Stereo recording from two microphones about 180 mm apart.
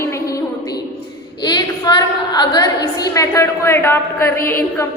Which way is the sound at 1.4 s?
25° left (ahead or behind).